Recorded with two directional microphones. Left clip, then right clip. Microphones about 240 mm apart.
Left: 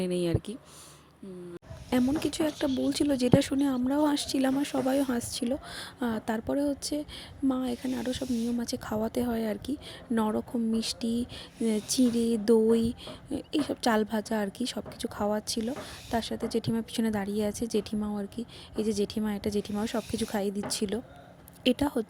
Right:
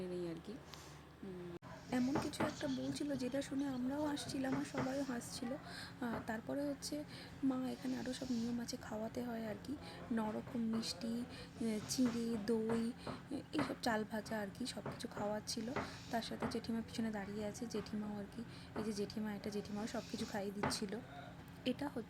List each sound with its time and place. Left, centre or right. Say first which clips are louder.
0.0 s speech: left 15 dB; left
1.9 s a woman's voice: left 11 dB; left
7.8 s a woman's voice: left 11 dB; left
8.5 s speech: left 13 dB; left
15.6 s a woman's voice: left 7 dB; left
16.1 s speech: left 12 dB; left